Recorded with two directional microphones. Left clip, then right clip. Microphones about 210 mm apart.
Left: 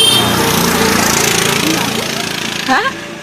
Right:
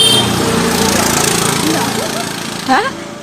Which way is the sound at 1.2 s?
40° right (ahead or behind).